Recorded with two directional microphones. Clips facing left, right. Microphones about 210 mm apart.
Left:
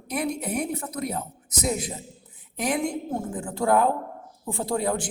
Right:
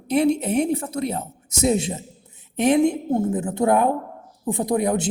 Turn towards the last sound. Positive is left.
turn(degrees=-20)  # may be behind; listen again after turning